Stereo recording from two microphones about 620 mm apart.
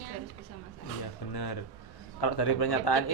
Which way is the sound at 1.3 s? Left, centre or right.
Left.